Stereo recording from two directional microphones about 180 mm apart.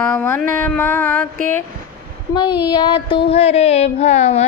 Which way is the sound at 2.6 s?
25° left (ahead or behind).